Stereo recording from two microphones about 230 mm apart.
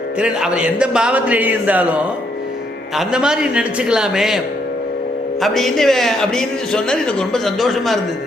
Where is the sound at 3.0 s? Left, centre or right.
Centre.